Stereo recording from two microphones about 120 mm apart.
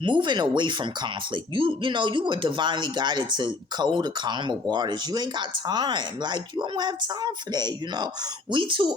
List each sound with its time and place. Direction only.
0.0 s speech: 40° right (ahead or behind)